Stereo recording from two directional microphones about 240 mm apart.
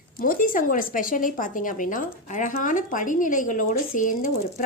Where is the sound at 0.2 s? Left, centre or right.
Left.